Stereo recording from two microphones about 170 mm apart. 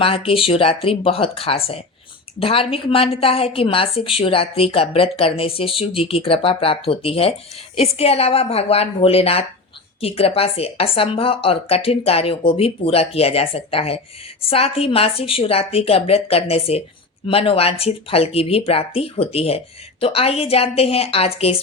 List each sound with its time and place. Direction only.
0.0 s a woman's voice: 35° left (ahead or behind)